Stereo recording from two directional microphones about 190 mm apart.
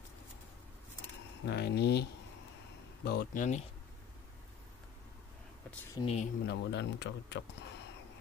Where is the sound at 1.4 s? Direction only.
60° left (ahead or behind).